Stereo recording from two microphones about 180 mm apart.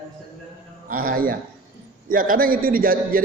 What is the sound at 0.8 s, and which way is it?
A man's voice, 50° right (ahead or behind).